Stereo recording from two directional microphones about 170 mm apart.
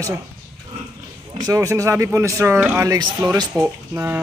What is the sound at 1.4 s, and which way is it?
Speech, 20° right (ahead or behind).